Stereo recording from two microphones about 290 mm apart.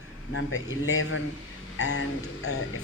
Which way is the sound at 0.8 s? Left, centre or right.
Left.